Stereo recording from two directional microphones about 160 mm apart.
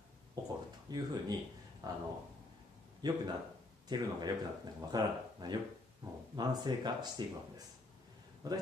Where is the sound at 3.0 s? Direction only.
25° right (ahead or behind).